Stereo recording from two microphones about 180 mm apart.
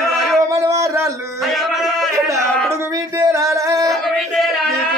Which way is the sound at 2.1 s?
15° right (ahead or behind).